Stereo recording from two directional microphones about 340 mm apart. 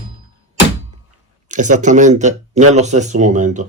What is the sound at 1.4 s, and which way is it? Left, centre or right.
Speech, right.